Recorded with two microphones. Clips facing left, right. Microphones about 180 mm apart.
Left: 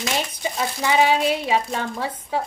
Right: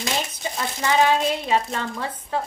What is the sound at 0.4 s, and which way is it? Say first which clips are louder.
A woman's voice: left 2 dB; 15° left (ahead or behind).